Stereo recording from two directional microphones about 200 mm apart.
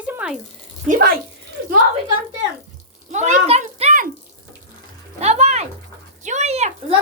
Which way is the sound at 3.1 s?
35° right (ahead or behind).